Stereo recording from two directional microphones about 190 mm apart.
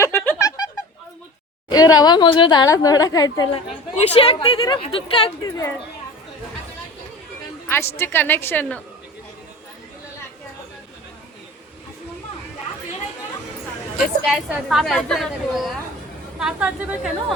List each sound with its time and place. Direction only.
0.0 s music: 10° left (ahead or behind)
2.0 s a woman's voice: 20° left (ahead or behind)
3.5 s a woman's voice: 30° left (ahead or behind)
5.5 s a woman's voice: 15° left (ahead or behind)
7.7 s a woman's voice: 15° left (ahead or behind)
14.3 s a woman's voice: centre (ahead or behind)